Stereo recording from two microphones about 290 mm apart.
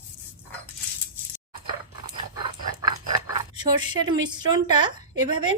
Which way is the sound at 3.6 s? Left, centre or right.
Centre.